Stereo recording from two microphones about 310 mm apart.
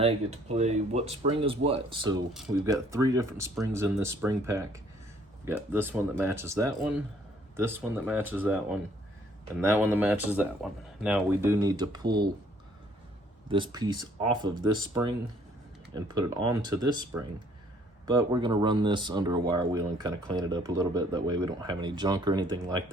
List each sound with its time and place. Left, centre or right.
0.0 s speech: right
13.5 s speech: centre
16.5 s speech: centre